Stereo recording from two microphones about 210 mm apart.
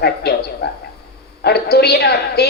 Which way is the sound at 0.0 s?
50° left (ahead or behind).